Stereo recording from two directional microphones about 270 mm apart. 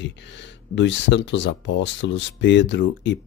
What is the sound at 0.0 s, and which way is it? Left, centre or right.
Speech, left.